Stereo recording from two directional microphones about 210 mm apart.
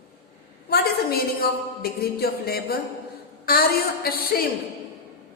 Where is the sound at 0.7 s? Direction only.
50° left (ahead or behind).